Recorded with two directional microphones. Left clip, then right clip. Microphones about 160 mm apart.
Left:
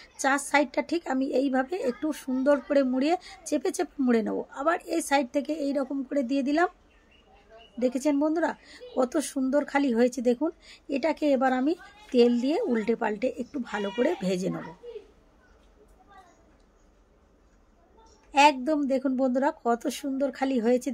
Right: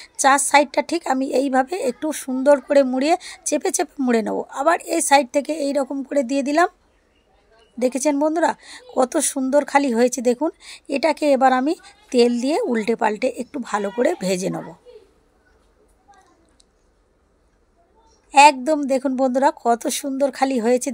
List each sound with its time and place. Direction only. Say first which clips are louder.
0.0 s a woman's voice: right 10 dB; 20° right (ahead or behind)
7.8 s a woman's voice: right 7 dB; 20° right (ahead or behind)
18.3 s a woman's voice: right 8 dB; 20° right (ahead or behind)